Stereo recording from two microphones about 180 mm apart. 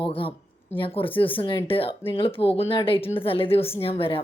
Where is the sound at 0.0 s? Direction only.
30° left (ahead or behind).